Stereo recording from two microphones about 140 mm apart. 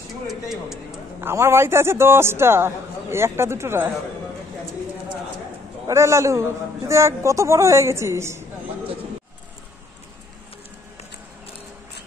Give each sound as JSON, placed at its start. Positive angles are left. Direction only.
{"t": 0.3, "sound": "speech", "side_deg": 0}
{"t": 1.2, "sound": "a man's voice", "side_deg": -20}
{"t": 5.9, "sound": "a woman's voice", "side_deg": -20}